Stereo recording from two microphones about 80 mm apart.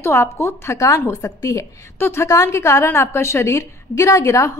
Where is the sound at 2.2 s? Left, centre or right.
Left.